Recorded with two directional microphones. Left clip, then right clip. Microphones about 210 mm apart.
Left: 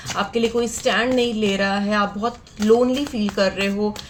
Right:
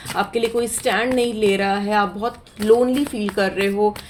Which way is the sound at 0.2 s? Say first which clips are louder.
Right 1 dB; 35° right (ahead or behind).